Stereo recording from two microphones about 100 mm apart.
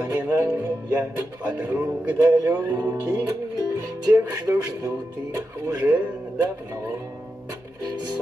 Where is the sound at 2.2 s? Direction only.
30° right (ahead or behind).